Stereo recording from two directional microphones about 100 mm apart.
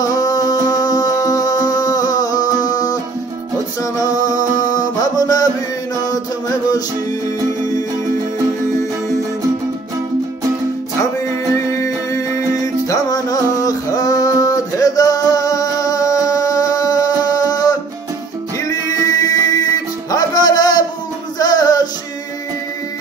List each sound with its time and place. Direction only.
0.0 s music: 40° left (ahead or behind)
12.6 s music: 35° left (ahead or behind)